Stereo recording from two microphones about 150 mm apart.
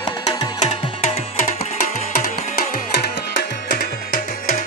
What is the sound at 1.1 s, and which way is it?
Music, 40° left (ahead or behind).